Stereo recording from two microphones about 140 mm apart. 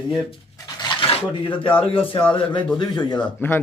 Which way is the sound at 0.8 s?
35° left (ahead or behind).